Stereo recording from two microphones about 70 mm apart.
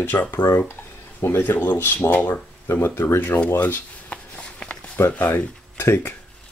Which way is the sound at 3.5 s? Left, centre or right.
Left.